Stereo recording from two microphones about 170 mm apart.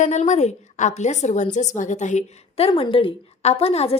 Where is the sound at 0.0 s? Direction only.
45° left (ahead or behind).